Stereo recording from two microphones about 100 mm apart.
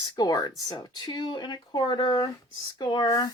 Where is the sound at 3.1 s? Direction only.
40° left (ahead or behind).